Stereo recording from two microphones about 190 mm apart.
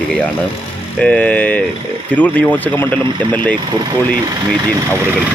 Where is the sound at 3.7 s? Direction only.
25° right (ahead or behind).